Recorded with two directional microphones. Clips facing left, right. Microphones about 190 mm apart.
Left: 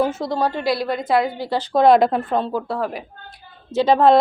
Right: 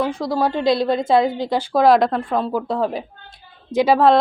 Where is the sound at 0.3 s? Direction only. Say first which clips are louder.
Right 5 dB; 15° right (ahead or behind).